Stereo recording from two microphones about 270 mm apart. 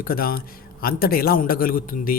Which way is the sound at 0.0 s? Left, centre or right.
Left.